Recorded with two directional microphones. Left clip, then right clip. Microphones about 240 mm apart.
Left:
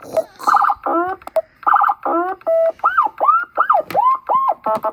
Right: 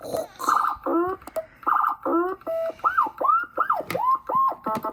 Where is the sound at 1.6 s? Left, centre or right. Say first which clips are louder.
Left 7 dB; left.